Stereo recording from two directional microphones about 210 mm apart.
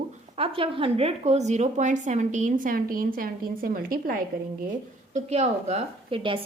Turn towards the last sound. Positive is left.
turn(degrees=-25)  # may be behind; listen again after turning